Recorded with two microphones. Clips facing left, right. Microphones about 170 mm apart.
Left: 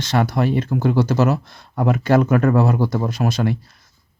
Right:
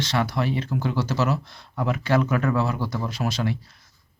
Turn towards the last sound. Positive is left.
turn(degrees=50)  # may be behind; listen again after turning